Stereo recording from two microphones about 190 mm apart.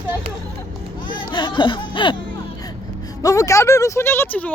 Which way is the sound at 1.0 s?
25° left (ahead or behind).